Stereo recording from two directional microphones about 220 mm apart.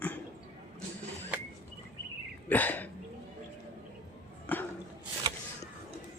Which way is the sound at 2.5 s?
10° left (ahead or behind).